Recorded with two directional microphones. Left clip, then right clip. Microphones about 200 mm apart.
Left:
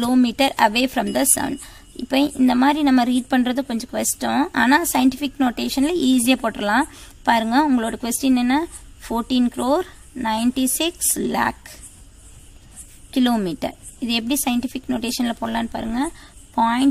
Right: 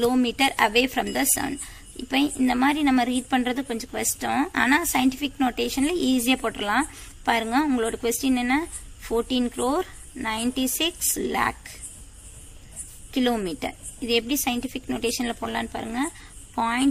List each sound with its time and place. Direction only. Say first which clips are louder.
0.0 s speech: left 3 dB; 55° left (ahead or behind)
13.1 s speech: left 4 dB; 60° left (ahead or behind)